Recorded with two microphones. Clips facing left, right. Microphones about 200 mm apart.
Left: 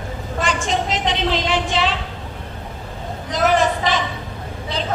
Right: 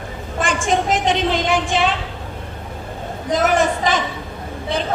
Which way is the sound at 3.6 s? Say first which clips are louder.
Right 1 dB; 50° right (ahead or behind).